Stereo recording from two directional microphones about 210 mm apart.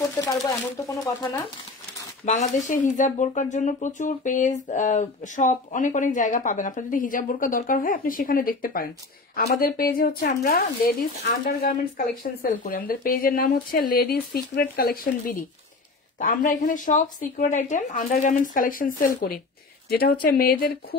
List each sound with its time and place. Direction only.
0.0 s speech: 15° left (ahead or behind)
2.2 s speech: 35° left (ahead or behind)